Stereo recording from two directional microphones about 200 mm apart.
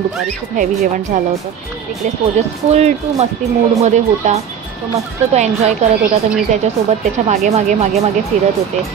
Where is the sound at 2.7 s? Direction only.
35° right (ahead or behind).